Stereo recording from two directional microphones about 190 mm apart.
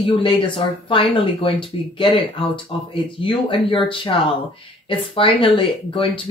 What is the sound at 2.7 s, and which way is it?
Speech, 30° left (ahead or behind).